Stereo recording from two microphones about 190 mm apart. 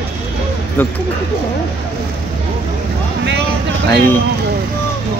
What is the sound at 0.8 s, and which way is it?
Speech, 10° left (ahead or behind).